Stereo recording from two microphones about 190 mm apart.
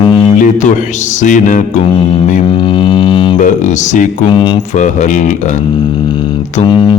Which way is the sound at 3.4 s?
40° left (ahead or behind).